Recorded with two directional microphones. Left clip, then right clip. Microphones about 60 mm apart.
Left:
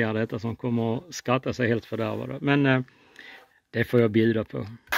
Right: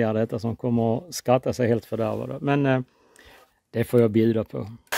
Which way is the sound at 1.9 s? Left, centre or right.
Right.